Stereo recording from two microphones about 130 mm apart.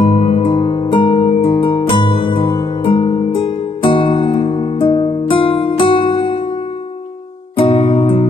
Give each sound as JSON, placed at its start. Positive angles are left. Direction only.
{"t": 0.0, "sound": "music", "side_deg": 50}
{"t": 7.5, "sound": "music", "side_deg": 45}